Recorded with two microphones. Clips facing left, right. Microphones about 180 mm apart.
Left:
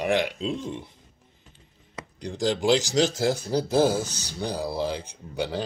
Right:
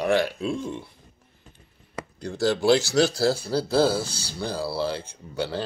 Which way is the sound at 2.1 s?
15° left (ahead or behind).